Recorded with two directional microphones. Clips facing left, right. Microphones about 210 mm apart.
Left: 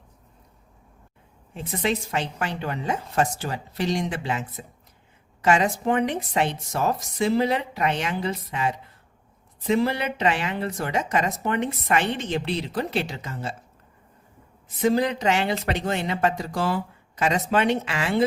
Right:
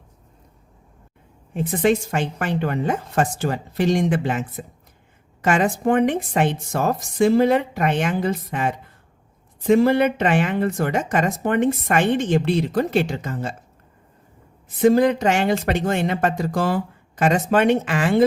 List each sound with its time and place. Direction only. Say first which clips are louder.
1.5 s speech: right 7 dB; 50° right (ahead or behind)
14.8 s speech: right 6 dB; 50° right (ahead or behind)